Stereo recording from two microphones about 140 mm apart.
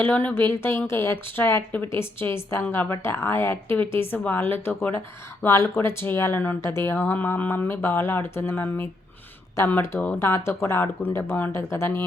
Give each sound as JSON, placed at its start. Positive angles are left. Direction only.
{"t": 0.0, "sound": "a woman's voice", "side_deg": 15}